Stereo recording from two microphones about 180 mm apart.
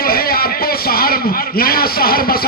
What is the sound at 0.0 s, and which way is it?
A man's voice, 55° left (ahead or behind).